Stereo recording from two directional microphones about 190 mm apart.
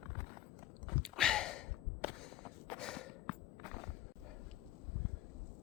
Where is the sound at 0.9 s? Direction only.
Centre (ahead or behind).